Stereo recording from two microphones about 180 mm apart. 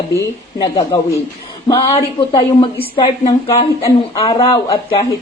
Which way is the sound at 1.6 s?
25° left (ahead or behind).